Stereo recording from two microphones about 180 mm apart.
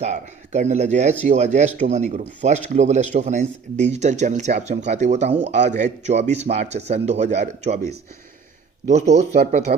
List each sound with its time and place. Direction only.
0.0 s speech: 40° right (ahead or behind)
8.9 s speech: 40° right (ahead or behind)